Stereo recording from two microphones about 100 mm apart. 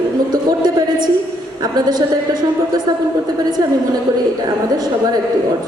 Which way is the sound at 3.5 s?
40° right (ahead or behind).